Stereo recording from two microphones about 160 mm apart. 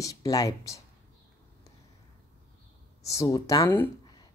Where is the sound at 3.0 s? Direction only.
20° left (ahead or behind).